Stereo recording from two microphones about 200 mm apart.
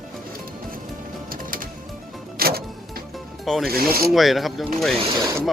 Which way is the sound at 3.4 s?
Centre (ahead or behind).